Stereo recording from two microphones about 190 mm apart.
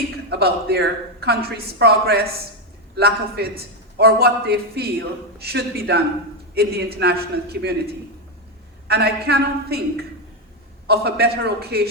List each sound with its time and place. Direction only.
0.3 s a man's voice: 55° right (ahead or behind)
8.9 s a man's voice: 60° right (ahead or behind)